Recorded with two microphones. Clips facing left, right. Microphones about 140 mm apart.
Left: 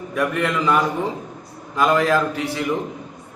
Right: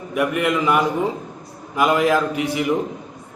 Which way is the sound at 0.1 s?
15° right (ahead or behind).